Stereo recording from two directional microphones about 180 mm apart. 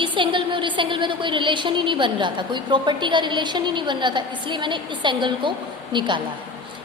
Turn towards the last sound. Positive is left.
turn(degrees=-25)  # may be behind; listen again after turning